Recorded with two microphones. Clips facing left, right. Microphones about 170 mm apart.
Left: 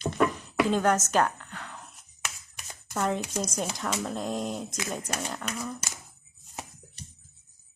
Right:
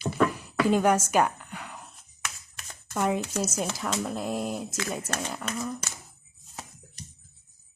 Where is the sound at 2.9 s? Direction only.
10° right (ahead or behind).